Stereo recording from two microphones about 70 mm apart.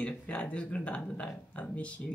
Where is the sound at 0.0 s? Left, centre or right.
Centre.